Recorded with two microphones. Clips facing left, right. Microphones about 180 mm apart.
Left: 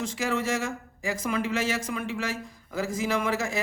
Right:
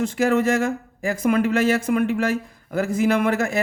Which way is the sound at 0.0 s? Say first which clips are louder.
Right 9 dB; 55° right (ahead or behind).